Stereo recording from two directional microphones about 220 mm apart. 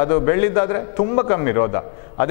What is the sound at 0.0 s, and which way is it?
A man's voice, 15° left (ahead or behind).